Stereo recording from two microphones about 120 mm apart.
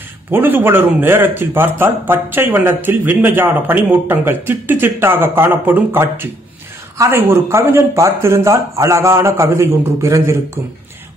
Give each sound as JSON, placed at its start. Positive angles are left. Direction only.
{"t": 0.3, "sound": "a man's voice", "side_deg": -15}